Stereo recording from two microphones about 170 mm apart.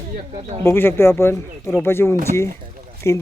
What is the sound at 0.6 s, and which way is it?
Speech, 15° left (ahead or behind).